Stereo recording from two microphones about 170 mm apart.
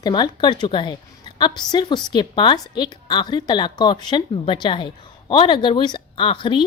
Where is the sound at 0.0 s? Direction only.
25° left (ahead or behind).